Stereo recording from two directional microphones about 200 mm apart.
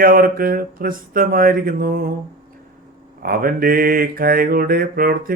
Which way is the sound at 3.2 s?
45° right (ahead or behind).